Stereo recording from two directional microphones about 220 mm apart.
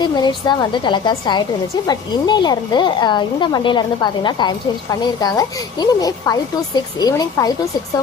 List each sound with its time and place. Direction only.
0.0 s a woman's voice: 20° left (ahead or behind)